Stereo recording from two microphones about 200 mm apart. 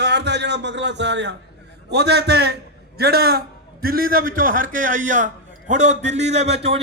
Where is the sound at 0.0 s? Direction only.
60° right (ahead or behind).